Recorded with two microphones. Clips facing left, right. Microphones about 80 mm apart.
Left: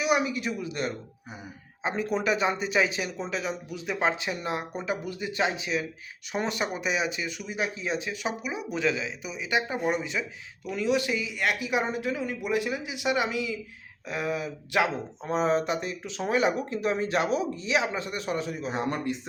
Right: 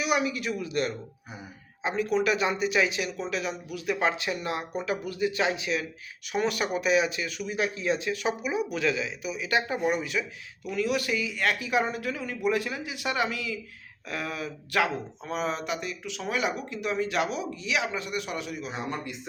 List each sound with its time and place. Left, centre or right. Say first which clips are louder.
0.0 s speech: left 1 dB; left
9.5 s speech: even; centre
15.2 s speech: left 7 dB; left